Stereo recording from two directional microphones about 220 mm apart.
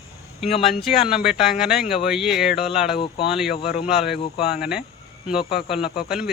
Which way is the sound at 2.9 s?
25° left (ahead or behind).